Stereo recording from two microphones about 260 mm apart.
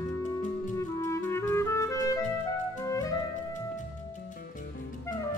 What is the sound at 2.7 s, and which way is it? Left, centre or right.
Music, centre.